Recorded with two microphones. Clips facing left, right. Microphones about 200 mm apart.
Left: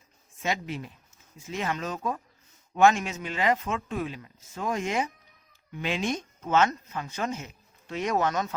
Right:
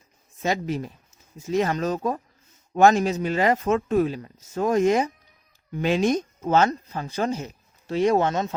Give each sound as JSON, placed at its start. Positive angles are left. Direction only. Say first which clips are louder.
{"t": 0.4, "sound": "speech", "louder": "right 6 dB", "side_deg": -40}